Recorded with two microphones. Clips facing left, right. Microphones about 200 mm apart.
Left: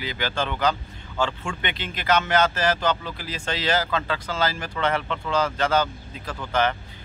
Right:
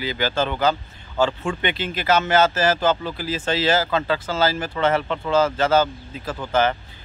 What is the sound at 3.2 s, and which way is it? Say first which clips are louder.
Speech: right 6 dB; 5° right (ahead or behind).